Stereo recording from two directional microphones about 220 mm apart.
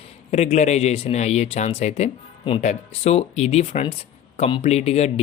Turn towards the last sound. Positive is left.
turn(degrees=30)  # may be behind; listen again after turning